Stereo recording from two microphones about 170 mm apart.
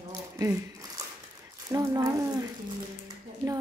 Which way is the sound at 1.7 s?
20° right (ahead or behind).